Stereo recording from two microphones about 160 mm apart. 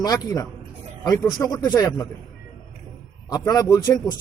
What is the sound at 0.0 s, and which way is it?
A man's voice, 25° left (ahead or behind).